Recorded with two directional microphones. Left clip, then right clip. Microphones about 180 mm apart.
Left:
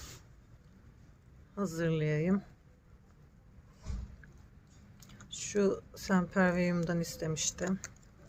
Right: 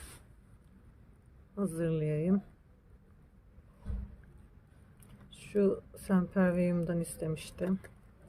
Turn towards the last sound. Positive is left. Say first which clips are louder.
# left 2 dB
turn(degrees=0)  # may be behind; listen again after turning